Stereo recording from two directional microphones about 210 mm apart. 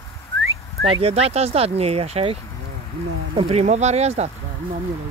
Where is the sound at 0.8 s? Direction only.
25° right (ahead or behind).